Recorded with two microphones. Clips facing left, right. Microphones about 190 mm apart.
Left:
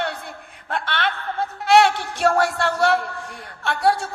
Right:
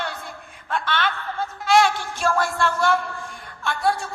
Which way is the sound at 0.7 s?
65° left (ahead or behind).